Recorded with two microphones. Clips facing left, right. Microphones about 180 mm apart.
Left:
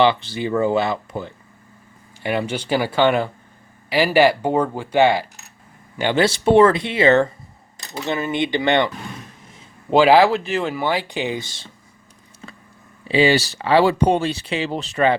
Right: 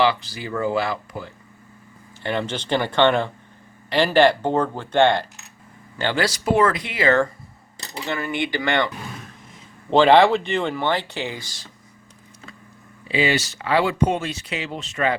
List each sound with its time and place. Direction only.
0.0 s speech: 25° left (ahead or behind)
2.2 s speech: 10° left (ahead or behind)
6.0 s speech: 20° left (ahead or behind)
9.9 s speech: 5° left (ahead or behind); by 11.7 s 25° left (ahead or behind)
13.1 s speech: 30° left (ahead or behind)